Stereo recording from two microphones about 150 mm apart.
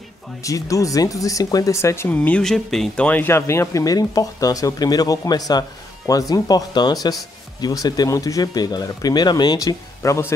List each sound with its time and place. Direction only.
0.4 s speech: 20° left (ahead or behind)